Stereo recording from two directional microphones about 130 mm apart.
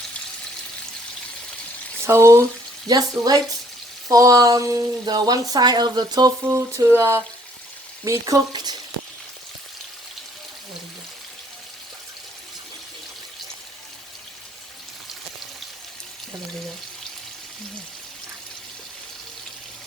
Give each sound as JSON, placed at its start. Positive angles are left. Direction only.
{"t": 2.0, "sound": "speech", "side_deg": -20}